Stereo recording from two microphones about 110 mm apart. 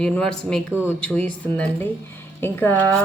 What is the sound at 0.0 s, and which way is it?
Speech, 5° left (ahead or behind).